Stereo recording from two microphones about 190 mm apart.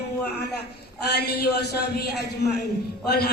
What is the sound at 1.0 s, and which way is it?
A woman's voice, 60° left (ahead or behind).